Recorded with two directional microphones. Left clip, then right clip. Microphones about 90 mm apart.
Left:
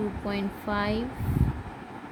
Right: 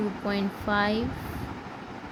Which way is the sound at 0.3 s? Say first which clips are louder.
Right 5 dB; 20° right (ahead or behind).